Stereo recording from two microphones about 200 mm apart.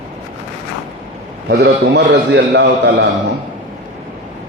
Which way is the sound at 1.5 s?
55° right (ahead or behind).